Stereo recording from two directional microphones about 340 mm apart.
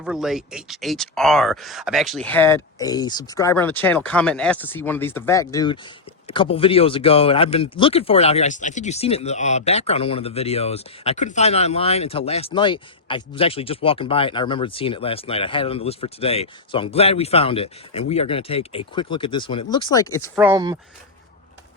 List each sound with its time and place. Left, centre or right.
0.0 s speech: centre
20.3 s speech: centre